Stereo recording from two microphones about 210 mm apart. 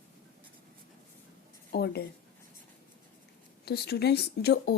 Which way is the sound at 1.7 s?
50° left (ahead or behind).